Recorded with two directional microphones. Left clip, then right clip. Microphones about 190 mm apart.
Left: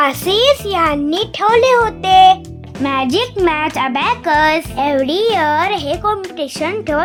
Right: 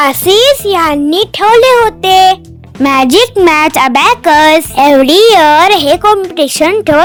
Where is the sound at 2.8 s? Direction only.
45° right (ahead or behind).